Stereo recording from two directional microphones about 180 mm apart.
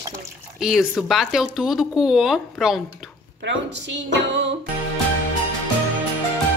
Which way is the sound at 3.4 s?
80° right.